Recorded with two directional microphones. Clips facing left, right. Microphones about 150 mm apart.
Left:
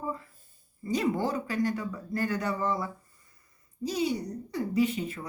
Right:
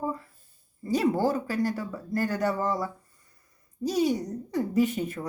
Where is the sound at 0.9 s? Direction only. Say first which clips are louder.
Right 4 dB; 35° right (ahead or behind).